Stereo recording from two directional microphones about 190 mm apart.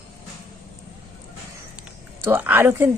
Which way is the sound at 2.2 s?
10° right (ahead or behind).